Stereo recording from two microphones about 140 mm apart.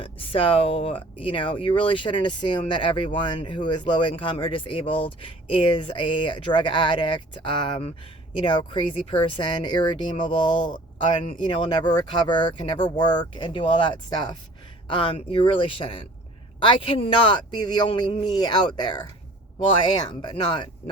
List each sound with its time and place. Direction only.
0.0 s speech: 40° left (ahead or behind)